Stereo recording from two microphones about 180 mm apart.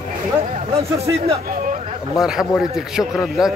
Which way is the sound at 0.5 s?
35° right (ahead or behind).